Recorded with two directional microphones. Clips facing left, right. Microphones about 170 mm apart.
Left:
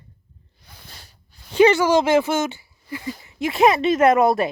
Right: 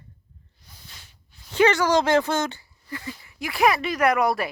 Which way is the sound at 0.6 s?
60° left (ahead or behind).